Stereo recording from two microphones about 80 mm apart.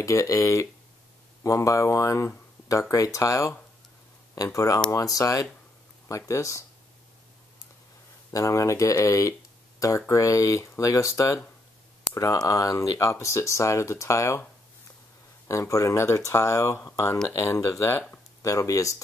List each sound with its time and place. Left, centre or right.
0.0 s speech: left
8.3 s speech: left
15.4 s speech: left